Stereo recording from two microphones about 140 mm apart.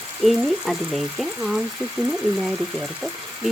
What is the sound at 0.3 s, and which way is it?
Speech, centre (ahead or behind).